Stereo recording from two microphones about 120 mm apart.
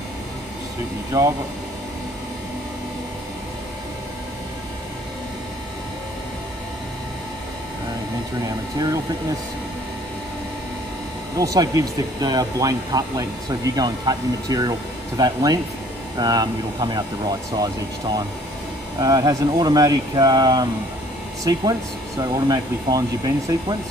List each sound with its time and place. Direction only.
1.1 s speech: 30° right (ahead or behind)
8.5 s speech: 30° right (ahead or behind)
11.3 s speech: 30° right (ahead or behind)
22.2 s speech: 35° right (ahead or behind)